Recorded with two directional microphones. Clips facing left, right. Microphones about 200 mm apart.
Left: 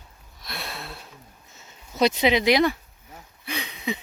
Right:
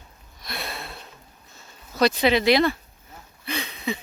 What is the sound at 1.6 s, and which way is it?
Speech, 20° left (ahead or behind).